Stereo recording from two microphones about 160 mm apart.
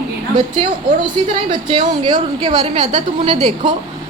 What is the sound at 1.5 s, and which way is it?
A woman's voice, 30° right (ahead or behind).